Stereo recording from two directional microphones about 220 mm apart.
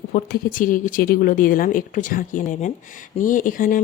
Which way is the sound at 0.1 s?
40° left (ahead or behind).